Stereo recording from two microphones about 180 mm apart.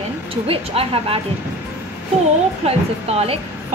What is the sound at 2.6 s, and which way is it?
Speech, 35° right (ahead or behind).